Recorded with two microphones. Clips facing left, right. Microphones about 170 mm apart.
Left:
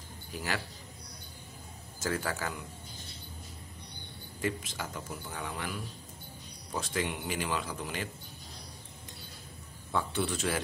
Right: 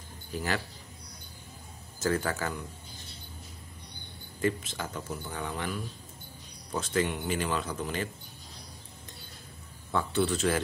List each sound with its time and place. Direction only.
2.0 s speech: 10° left (ahead or behind)
4.4 s speech: 10° left (ahead or behind)
9.9 s speech: 10° left (ahead or behind)